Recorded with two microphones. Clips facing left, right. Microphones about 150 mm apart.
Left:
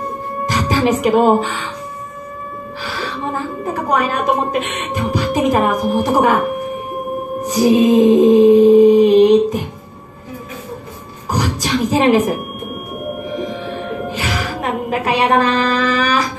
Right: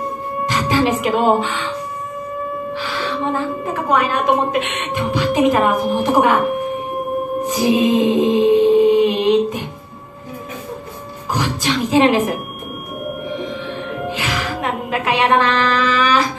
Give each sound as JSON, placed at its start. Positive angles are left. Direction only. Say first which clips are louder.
{"t": 0.7, "sound": "speech", "louder": "left 2 dB", "side_deg": 40}
{"t": 2.8, "sound": "a woman's voice", "louder": "even", "side_deg": 40}
{"t": 7.4, "sound": "music", "louder": "left 5 dB", "side_deg": 40}
{"t": 11.3, "sound": "speech", "louder": "left 2 dB", "side_deg": 40}
{"t": 13.4, "sound": "music", "louder": "left 2 dB", "side_deg": 40}